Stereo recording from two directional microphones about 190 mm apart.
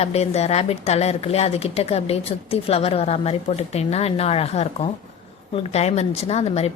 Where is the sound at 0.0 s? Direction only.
35° left (ahead or behind).